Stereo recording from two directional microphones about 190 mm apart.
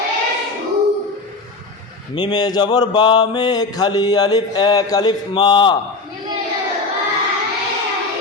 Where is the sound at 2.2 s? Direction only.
25° left (ahead or behind).